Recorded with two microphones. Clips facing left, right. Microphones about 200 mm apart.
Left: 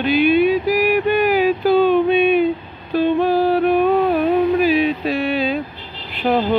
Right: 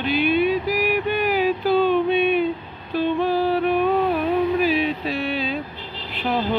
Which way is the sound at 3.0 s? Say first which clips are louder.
Left 5 dB; 45° left (ahead or behind).